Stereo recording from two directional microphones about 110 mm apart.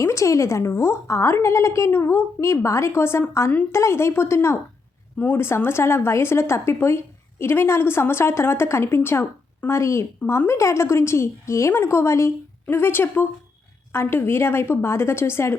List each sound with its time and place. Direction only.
0.0 s a woman's voice: 25° left (ahead or behind)